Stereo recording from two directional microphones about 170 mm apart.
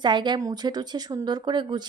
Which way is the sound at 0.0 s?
25° right (ahead or behind).